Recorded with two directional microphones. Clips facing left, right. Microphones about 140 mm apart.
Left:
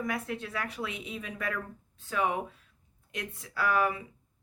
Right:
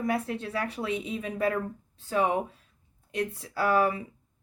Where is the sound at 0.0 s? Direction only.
30° right (ahead or behind).